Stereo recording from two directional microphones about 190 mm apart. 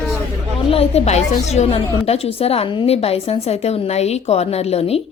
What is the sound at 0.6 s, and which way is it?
A woman's voice, 30° left (ahead or behind).